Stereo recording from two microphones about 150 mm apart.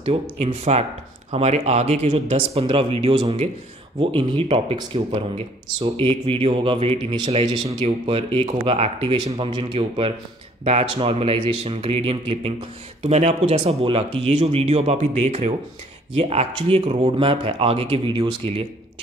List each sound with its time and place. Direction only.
0.0 s speech: 40° right (ahead or behind)
5.8 s speech: 40° right (ahead or behind)